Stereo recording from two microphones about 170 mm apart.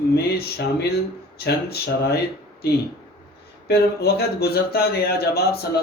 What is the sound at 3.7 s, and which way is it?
Speech, 70° left (ahead or behind).